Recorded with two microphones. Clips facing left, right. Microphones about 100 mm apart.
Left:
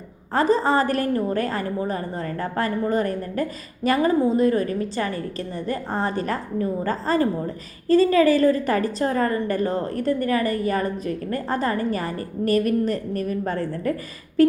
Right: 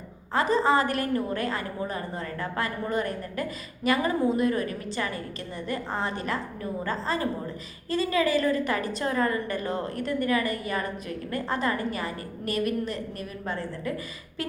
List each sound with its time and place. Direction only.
0.3 s a woman's voice: 35° left (ahead or behind)